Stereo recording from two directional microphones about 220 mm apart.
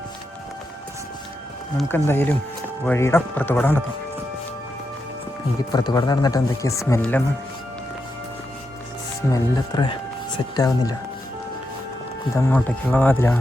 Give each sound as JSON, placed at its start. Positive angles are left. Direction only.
{"t": 2.0, "sound": "speech", "side_deg": 10}
{"t": 5.7, "sound": "speech", "side_deg": 15}
{"t": 9.3, "sound": "speech", "side_deg": 20}
{"t": 12.3, "sound": "speech", "side_deg": 10}